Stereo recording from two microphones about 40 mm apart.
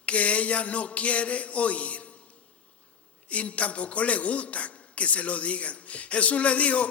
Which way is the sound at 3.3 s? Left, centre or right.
Left.